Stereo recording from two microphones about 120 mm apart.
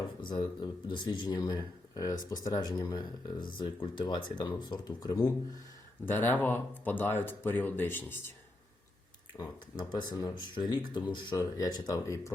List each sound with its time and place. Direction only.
0.2 s speech: 40° left (ahead or behind)
6.1 s speech: 15° left (ahead or behind)
9.4 s speech: 35° left (ahead or behind)